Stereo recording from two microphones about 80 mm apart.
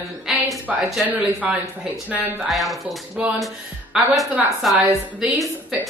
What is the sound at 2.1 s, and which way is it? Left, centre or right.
Speech, centre.